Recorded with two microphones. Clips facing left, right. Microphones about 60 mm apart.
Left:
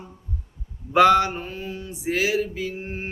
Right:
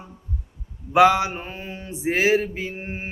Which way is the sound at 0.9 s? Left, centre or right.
Centre.